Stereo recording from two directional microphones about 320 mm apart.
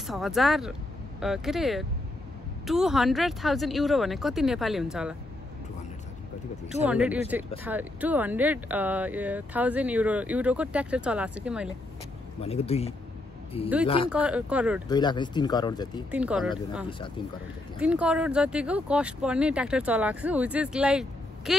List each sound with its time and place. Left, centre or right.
0.0 s speech: centre
6.7 s speech: centre
12.4 s speech: centre
14.0 s speech: centre
14.9 s speech: centre
16.1 s speech: centre